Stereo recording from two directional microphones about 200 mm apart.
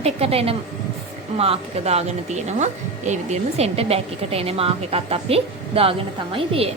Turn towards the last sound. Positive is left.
turn(degrees=-30)  # may be behind; listen again after turning